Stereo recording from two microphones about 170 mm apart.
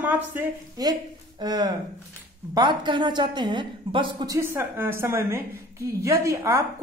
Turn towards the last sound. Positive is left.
turn(degrees=-15)  # may be behind; listen again after turning